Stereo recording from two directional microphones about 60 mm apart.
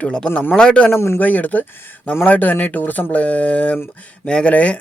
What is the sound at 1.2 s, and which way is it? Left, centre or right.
Speech, left.